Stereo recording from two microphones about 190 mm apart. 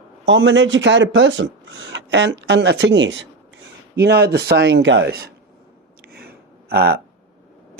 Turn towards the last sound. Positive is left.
turn(degrees=-55)  # may be behind; listen again after turning